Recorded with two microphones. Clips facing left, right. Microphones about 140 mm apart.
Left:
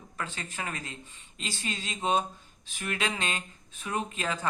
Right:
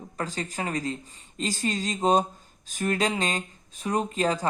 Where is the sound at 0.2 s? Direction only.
35° right (ahead or behind).